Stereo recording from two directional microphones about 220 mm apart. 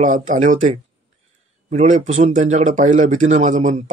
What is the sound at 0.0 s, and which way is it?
Speech, 35° right (ahead or behind).